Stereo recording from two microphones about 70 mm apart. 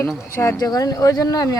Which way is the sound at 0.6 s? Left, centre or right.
Left.